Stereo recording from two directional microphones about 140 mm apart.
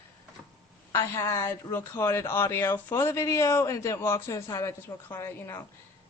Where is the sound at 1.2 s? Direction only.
20° left (ahead or behind).